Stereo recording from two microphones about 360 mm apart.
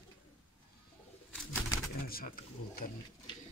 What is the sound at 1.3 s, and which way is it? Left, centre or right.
Bird, centre.